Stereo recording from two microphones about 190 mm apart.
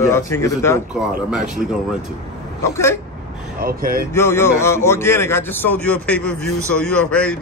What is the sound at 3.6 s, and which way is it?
Speech, 50° right (ahead or behind).